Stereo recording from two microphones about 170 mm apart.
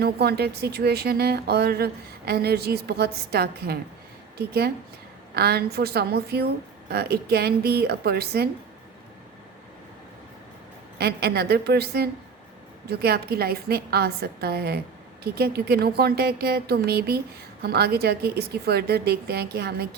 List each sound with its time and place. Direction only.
0.0 s speech: 70° right (ahead or behind)
10.9 s speech: 70° right (ahead or behind)